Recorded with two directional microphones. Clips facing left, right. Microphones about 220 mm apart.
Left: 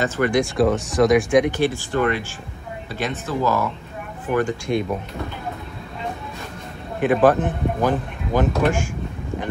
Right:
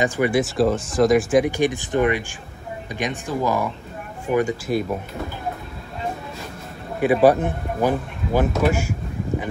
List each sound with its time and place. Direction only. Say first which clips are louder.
0.0 s speech: even; 10° right (ahead or behind)
1.6 s speech: right 1 dB; 20° right (ahead or behind)
7.0 s speech: right 1 dB; 10° right (ahead or behind)